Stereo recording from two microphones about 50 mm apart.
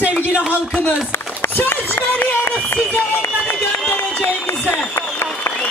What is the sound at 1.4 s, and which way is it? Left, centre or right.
Run, left.